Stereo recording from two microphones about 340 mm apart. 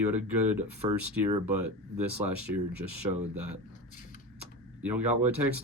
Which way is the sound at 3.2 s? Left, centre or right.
Right.